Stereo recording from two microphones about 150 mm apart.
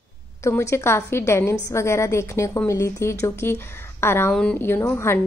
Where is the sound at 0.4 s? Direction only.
20° left (ahead or behind).